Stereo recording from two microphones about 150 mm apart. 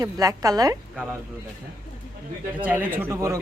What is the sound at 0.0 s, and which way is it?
Speech, 25° right (ahead or behind).